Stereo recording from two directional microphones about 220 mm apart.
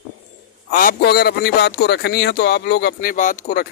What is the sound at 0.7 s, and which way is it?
Speech, 40° left (ahead or behind).